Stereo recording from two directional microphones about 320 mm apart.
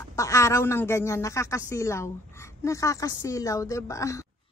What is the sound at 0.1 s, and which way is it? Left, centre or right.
Speech, centre.